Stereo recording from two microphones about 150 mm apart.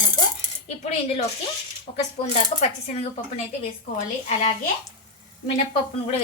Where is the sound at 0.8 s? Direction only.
50° left (ahead or behind).